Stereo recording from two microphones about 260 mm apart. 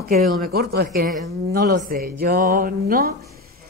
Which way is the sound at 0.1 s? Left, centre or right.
Right.